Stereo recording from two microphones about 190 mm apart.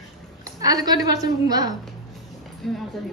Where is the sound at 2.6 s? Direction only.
Centre (ahead or behind).